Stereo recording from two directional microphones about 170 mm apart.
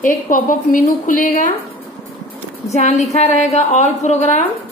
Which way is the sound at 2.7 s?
40° left (ahead or behind).